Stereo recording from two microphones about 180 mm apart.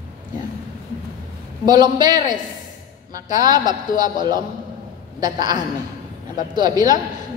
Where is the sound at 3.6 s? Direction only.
45° left (ahead or behind).